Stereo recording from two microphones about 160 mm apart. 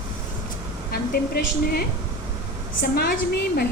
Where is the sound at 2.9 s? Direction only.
75° left (ahead or behind).